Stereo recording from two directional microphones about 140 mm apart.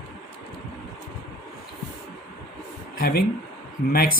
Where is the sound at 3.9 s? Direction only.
90° left.